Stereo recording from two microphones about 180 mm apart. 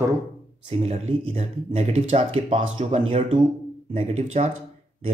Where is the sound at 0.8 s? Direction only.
35° right (ahead or behind).